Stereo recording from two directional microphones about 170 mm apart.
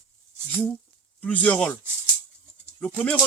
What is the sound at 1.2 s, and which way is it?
Speech, 10° left (ahead or behind).